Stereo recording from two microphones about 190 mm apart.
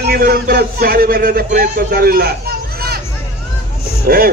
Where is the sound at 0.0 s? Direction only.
55° right (ahead or behind).